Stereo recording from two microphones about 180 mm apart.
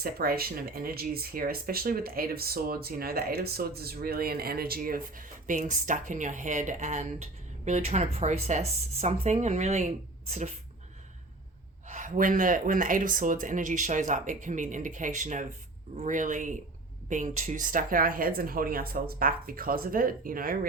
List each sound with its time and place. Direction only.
0.0 s speech: 55° right (ahead or behind); by 9.8 s 40° right (ahead or behind)
11.9 s speech: 45° right (ahead or behind)